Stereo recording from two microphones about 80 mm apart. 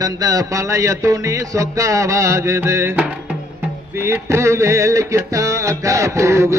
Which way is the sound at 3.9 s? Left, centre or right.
Right.